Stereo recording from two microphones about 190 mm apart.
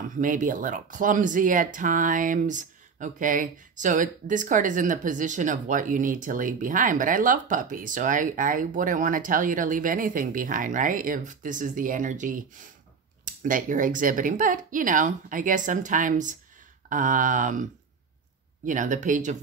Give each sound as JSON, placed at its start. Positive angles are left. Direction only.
{"t": 0.2, "sound": "speech", "side_deg": -45}
{"t": 18.7, "sound": "speech", "side_deg": -40}